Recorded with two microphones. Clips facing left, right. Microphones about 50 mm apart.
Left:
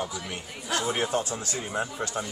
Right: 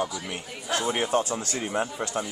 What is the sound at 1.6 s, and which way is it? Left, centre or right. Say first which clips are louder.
Speech: right 2 dB; centre.